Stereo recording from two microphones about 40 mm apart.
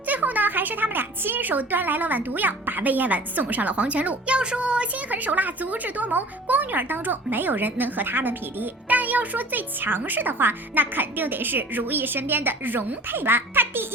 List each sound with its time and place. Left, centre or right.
0.0 s a woman's voice: right
4.4 s speech: right
5.0 s a woman's voice: right
9.0 s speech: right